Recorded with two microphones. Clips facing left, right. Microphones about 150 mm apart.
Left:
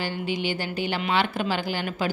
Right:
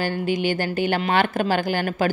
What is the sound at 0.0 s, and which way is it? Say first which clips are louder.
A woman's voice: right 5 dB; 50° right (ahead or behind).